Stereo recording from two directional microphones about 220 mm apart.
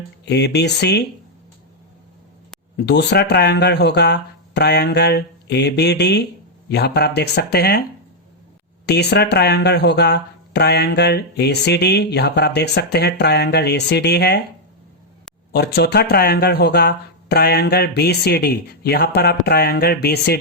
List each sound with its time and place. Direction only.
0.3 s speech: 50° left (ahead or behind)
2.8 s speech: 50° left (ahead or behind)
8.9 s speech: 50° left (ahead or behind)
15.5 s speech: 50° left (ahead or behind)